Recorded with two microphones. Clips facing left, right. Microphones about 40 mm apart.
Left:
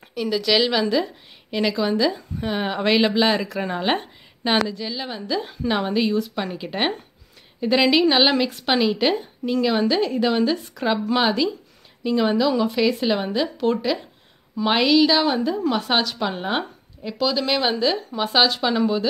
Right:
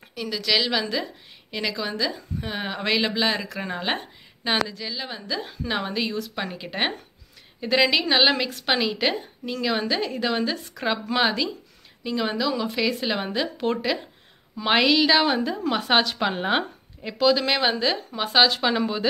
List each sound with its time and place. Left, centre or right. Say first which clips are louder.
0.1 s a woman's voice: left 4 dB; centre
16.2 s speech: right 1 dB; right
17.2 s speech: right 1 dB; centre